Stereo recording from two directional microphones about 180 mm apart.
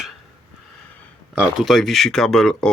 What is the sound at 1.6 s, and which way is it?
Speech, centre (ahead or behind).